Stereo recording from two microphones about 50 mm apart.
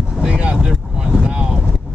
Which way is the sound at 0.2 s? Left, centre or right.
Centre.